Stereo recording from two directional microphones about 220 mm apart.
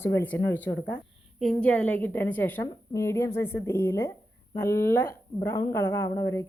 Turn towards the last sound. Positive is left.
turn(degrees=15)  # may be behind; listen again after turning